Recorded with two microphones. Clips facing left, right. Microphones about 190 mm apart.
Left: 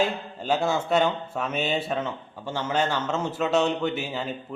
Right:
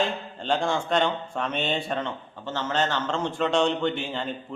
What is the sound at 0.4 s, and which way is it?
A man's voice, 5° left (ahead or behind).